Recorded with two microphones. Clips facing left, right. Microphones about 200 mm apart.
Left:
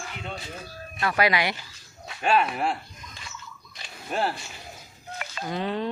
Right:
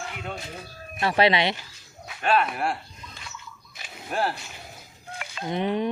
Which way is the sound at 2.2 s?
10° left (ahead or behind).